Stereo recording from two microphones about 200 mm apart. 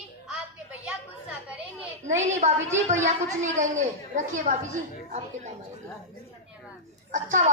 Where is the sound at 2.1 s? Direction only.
35° right (ahead or behind).